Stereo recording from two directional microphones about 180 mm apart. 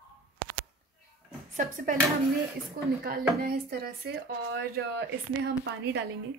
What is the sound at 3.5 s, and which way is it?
Speech, 60° right (ahead or behind).